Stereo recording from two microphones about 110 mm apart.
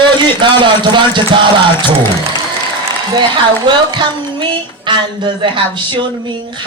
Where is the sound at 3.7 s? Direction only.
45° right (ahead or behind).